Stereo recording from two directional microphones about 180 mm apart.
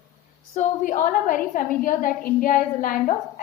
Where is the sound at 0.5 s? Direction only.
45° left (ahead or behind).